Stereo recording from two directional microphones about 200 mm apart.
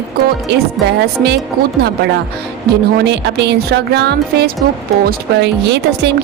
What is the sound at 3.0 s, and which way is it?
A woman's voice, 60° right (ahead or behind).